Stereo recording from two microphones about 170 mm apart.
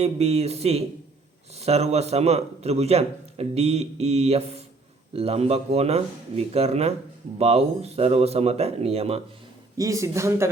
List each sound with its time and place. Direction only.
0.0 s a man's voice: 40° right (ahead or behind)
9.7 s speech: 20° right (ahead or behind)